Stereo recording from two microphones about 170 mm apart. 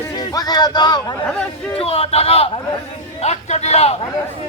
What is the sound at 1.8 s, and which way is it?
A man's voice, 35° left (ahead or behind).